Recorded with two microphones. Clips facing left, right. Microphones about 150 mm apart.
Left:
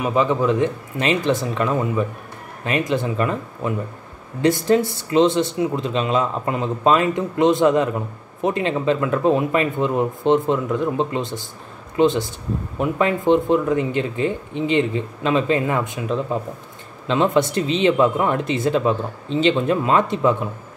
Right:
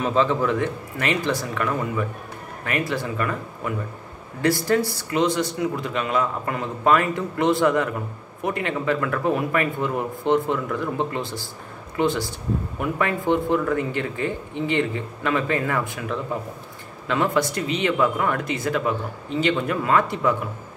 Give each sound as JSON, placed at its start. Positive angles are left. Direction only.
{"t": 0.0, "sound": "a man's voice", "side_deg": 15}